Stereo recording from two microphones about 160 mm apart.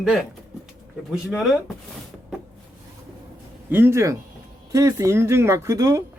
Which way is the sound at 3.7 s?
15° right (ahead or behind).